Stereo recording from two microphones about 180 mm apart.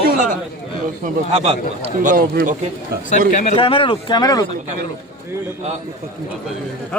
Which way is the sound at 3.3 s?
40° left (ahead or behind).